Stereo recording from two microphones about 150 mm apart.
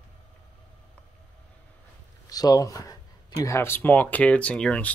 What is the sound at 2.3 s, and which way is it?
Speech, 25° left (ahead or behind).